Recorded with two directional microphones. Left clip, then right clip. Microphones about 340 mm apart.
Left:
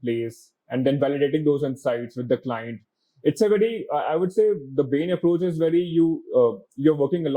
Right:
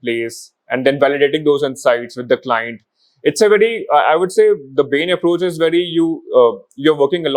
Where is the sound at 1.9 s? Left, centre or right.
Centre.